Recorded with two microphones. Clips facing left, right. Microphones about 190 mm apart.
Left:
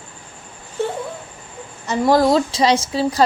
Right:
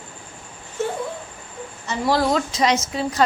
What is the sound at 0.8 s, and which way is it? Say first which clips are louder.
A woman's voice: left 2 dB; 35° left (ahead or behind).